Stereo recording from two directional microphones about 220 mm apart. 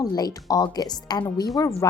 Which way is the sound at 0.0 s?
15° left (ahead or behind).